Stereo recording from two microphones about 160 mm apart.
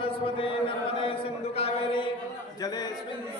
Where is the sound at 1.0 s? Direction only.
35° left (ahead or behind).